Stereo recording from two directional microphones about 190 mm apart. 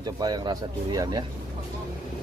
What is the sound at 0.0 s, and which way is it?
Speech, 20° right (ahead or behind).